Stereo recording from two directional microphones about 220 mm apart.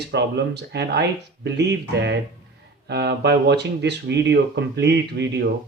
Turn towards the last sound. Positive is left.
turn(degrees=-50)  # may be behind; listen again after turning